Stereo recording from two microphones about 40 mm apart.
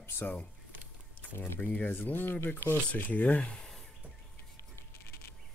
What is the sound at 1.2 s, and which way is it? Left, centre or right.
Speech, left.